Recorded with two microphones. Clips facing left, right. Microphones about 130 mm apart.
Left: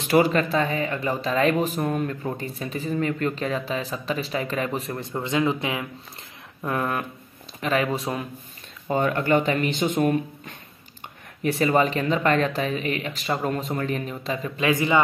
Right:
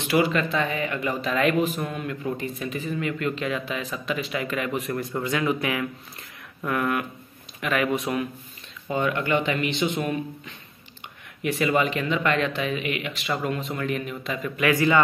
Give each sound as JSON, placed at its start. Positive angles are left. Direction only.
{"t": 0.0, "sound": "speech", "side_deg": 40}
{"t": 8.8, "sound": "speech", "side_deg": 40}